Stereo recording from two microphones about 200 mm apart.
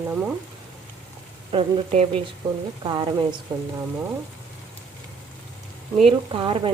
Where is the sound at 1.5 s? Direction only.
30° right (ahead or behind).